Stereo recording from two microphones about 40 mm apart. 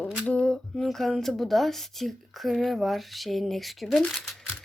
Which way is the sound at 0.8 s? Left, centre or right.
Centre.